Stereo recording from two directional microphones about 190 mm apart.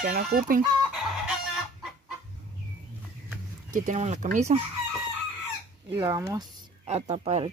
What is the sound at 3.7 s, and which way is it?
Speech, 40° right (ahead or behind).